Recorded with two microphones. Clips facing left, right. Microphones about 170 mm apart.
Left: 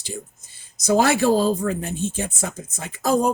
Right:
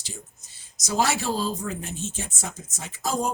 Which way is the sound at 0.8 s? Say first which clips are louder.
Left 7 dB; 55° left (ahead or behind).